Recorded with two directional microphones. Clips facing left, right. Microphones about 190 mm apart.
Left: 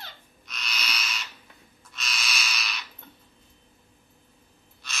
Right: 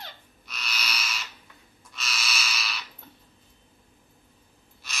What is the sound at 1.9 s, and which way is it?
Bird, 5° right (ahead or behind).